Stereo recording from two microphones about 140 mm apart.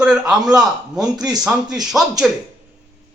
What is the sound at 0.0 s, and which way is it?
Speech, 5° right (ahead or behind).